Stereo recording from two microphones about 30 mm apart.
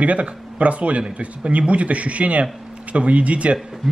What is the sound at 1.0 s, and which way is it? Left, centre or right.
A man's voice, right.